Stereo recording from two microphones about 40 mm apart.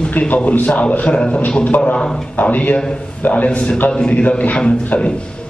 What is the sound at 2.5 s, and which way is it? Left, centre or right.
Speech, left.